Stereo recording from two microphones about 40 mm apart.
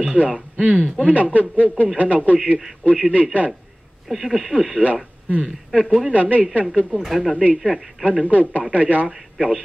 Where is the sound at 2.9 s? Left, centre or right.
Right.